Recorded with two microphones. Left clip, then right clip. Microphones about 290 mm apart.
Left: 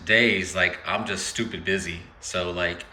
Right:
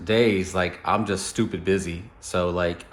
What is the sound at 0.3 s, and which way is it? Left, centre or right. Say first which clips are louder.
Speech: left 2 dB; centre.